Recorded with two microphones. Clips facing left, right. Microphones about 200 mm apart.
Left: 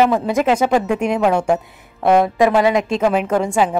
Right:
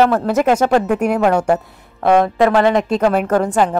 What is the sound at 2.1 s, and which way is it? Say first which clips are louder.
A woman's voice: right 1 dB; 10° left (ahead or behind).